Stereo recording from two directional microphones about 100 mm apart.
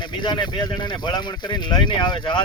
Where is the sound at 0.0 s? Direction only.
50° left (ahead or behind).